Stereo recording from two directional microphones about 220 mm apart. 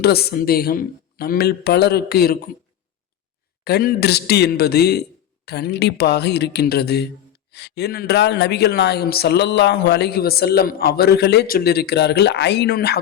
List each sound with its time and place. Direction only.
0.0 s speech: 45° left (ahead or behind)
3.6 s speech: 45° left (ahead or behind)